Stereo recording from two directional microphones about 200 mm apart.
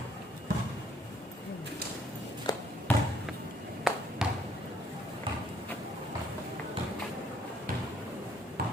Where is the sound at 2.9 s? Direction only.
10° left (ahead or behind).